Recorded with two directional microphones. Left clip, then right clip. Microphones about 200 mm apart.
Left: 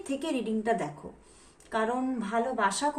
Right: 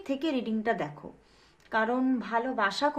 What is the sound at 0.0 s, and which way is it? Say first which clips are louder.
Speech: right 1 dB; 45° right (ahead or behind).